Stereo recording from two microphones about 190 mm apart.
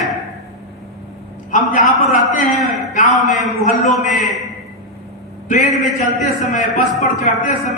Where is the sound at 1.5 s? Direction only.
45° left (ahead or behind).